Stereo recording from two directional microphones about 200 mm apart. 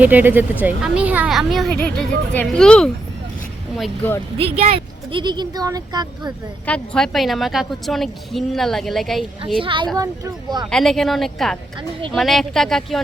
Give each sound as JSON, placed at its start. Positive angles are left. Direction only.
{"t": 0.0, "sound": "speech", "side_deg": -10}
{"t": 5.1, "sound": "speech", "side_deg": -20}
{"t": 6.7, "sound": "speech", "side_deg": 5}
{"t": 9.6, "sound": "speech", "side_deg": -25}
{"t": 10.7, "sound": "speech", "side_deg": 0}